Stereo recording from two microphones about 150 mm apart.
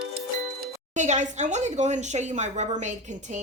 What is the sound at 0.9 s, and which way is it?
Speech, 55° right (ahead or behind).